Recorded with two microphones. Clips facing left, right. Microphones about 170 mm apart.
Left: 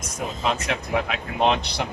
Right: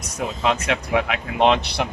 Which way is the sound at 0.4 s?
70° right (ahead or behind).